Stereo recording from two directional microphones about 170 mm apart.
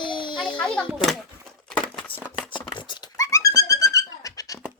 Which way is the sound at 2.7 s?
30° left (ahead or behind).